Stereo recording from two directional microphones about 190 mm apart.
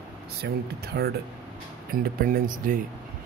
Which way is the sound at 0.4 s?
60° right (ahead or behind).